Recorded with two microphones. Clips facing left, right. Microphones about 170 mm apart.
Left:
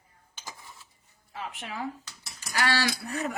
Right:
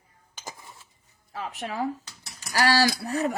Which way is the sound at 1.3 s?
40° right (ahead or behind).